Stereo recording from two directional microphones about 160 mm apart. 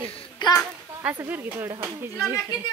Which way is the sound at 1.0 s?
10° right (ahead or behind).